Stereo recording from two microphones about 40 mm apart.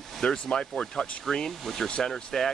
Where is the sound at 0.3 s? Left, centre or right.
Centre.